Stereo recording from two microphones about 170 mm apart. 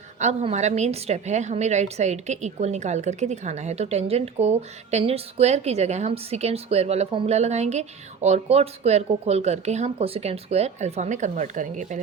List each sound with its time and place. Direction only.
0.2 s a woman's voice: 45° right (ahead or behind)